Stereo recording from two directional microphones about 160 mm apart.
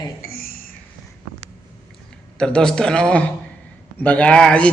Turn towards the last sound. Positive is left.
turn(degrees=5)  # may be behind; listen again after turning